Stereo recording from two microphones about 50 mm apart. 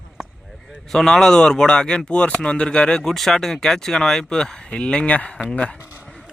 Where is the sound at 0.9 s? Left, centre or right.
Centre.